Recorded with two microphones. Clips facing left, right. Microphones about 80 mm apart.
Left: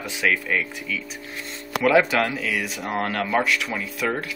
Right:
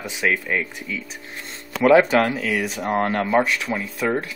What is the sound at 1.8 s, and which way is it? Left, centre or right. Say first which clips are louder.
Speech: right 4 dB; right.